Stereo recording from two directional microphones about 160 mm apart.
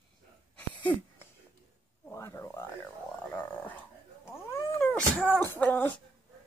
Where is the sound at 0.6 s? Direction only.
10° left (ahead or behind).